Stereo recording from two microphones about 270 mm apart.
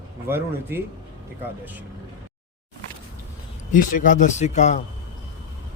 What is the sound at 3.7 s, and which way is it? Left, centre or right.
Speech, left.